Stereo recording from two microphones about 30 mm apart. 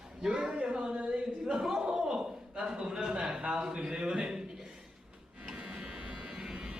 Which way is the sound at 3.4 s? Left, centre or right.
Right.